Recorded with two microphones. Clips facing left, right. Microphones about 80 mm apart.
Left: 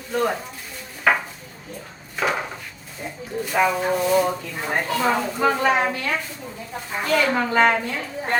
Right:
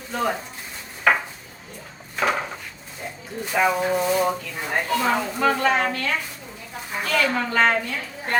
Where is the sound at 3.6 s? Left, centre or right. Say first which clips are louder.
Right 2 dB; centre.